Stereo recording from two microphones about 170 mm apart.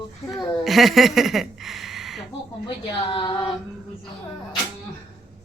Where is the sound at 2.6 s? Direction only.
30° left (ahead or behind).